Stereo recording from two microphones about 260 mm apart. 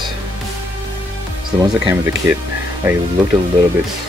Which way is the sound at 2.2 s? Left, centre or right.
Centre.